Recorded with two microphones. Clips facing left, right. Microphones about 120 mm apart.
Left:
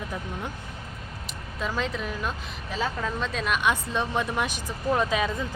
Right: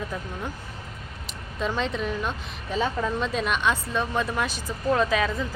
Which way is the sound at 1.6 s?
Centre (ahead or behind).